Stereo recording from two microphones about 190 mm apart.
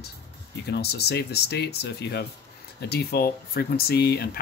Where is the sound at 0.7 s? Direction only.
60° left (ahead or behind).